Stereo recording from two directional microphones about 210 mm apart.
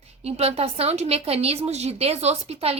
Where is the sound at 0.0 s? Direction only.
30° right (ahead or behind).